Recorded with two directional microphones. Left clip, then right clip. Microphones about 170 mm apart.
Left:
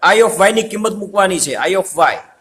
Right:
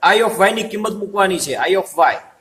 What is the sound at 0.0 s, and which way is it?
A man's voice, 50° left (ahead or behind).